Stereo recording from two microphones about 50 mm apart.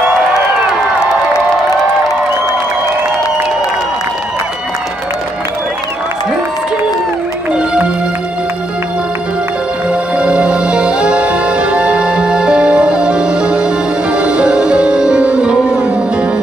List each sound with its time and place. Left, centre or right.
9.8 s music: right